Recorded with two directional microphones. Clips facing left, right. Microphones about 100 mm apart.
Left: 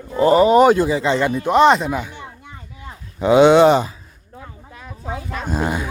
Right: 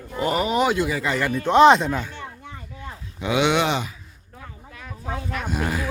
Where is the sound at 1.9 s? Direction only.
15° left (ahead or behind).